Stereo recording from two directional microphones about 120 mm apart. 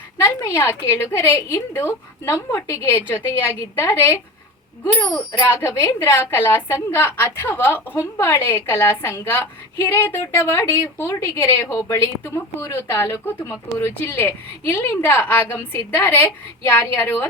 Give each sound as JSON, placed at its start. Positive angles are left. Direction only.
{"t": 0.2, "sound": "a woman's voice", "side_deg": 25}
{"t": 5.5, "sound": "a woman's voice", "side_deg": 20}